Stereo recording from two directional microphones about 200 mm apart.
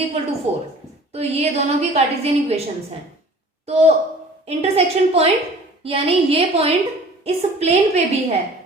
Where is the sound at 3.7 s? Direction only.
30° right (ahead or behind).